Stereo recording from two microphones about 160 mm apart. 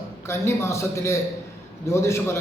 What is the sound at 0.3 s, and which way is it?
A man's voice, 15° left (ahead or behind).